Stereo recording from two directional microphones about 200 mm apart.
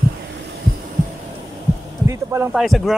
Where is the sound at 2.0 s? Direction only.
15° right (ahead or behind).